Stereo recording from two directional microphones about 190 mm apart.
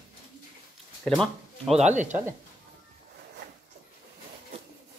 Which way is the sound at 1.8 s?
40° right (ahead or behind).